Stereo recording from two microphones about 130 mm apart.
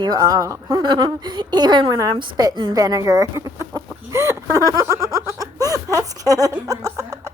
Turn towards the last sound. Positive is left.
turn(degrees=-25)  # may be behind; listen again after turning